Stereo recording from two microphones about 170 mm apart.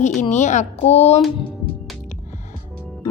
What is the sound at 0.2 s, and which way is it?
Speech, 45° left (ahead or behind).